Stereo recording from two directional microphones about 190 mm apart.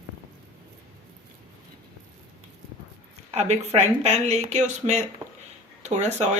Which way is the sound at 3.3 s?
35° right (ahead or behind).